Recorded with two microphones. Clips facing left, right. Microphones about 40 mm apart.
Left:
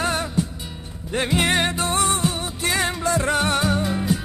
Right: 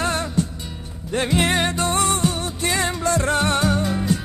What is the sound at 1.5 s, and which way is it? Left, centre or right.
Music, left.